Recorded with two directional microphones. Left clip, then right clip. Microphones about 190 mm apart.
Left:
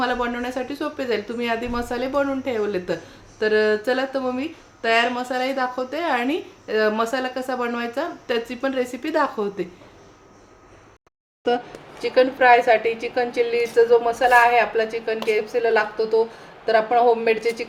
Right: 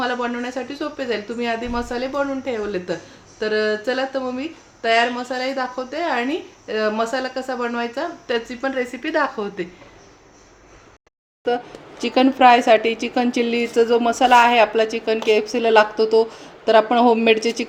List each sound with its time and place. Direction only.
0.0 s speech: 5° left (ahead or behind)
11.4 s speech: centre (ahead or behind)
11.9 s a woman's voice: 40° right (ahead or behind)
15.0 s speech: 5° right (ahead or behind)
16.6 s a woman's voice: 45° right (ahead or behind)